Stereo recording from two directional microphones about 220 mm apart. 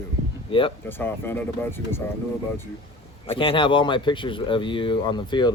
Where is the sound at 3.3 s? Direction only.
25° left (ahead or behind).